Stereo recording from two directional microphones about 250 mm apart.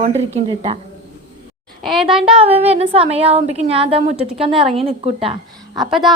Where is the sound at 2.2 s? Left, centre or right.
Right.